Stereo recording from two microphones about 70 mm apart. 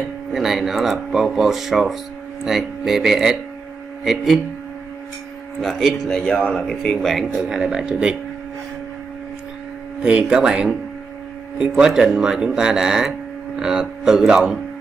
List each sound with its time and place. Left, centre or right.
0.3 s speech: centre
5.6 s speech: centre
10.0 s speech: centre